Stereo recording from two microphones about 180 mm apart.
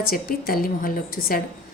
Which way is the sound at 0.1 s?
55° left (ahead or behind).